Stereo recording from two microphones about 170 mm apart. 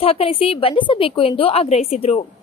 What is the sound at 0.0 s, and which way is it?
A woman's voice, 35° left (ahead or behind).